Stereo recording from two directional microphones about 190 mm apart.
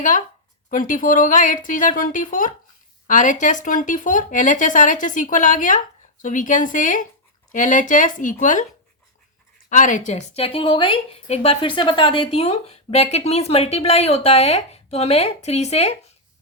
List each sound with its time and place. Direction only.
0.7 s speech: 45° left (ahead or behind)
9.6 s a woman's voice: 40° left (ahead or behind)